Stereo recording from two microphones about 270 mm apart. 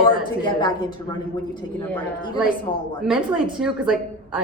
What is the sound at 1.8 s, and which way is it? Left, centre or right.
A woman's voice, centre.